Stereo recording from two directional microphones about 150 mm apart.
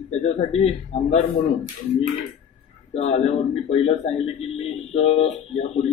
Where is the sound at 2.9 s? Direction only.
45° left (ahead or behind).